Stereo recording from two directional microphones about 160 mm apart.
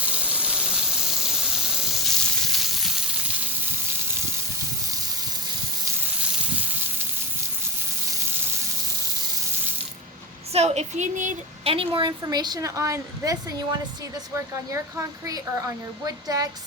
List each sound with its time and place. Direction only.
0.0 s a sound: 10° right (ahead or behind)
10.5 s speech: 45° right (ahead or behind)
11.6 s a woman's voice: 35° right (ahead or behind)